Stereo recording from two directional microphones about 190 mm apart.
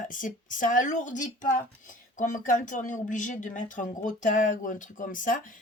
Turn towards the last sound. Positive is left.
turn(degrees=45)  # may be behind; listen again after turning